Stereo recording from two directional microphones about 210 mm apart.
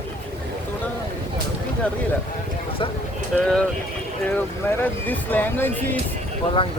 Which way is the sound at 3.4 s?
5° left (ahead or behind).